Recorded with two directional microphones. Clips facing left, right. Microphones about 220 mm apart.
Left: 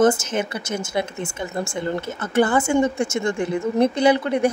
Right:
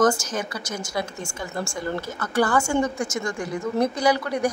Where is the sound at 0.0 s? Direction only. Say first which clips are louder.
Left 3 dB; 25° left (ahead or behind).